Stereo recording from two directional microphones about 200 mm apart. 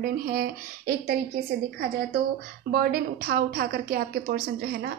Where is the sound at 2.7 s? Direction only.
50° right (ahead or behind).